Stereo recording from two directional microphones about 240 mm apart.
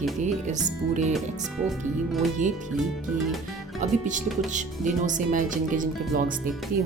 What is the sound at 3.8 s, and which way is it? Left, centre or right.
Speech, right.